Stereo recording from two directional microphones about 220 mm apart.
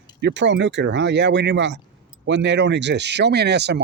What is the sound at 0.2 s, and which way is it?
Speech, 55° right (ahead or behind).